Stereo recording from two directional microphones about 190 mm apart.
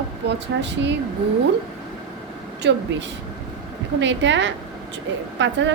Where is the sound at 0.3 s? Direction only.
65° right (ahead or behind).